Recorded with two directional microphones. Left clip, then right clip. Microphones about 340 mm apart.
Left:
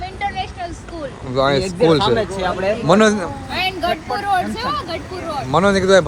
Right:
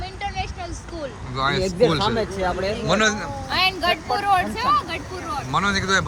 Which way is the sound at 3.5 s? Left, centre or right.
Right.